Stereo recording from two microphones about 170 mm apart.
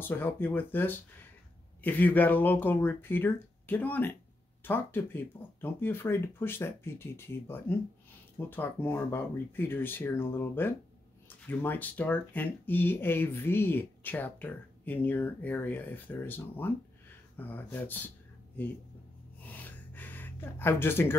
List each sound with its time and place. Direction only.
0.0 s speech: 10° left (ahead or behind)
19.4 s gasp: 10° left (ahead or behind)